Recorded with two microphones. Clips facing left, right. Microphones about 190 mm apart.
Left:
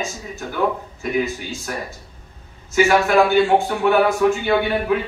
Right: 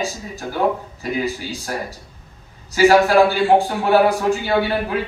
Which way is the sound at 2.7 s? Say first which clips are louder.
Right 3 dB; 35° right (ahead or behind).